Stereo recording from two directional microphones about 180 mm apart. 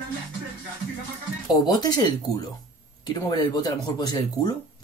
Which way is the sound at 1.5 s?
20° left (ahead or behind).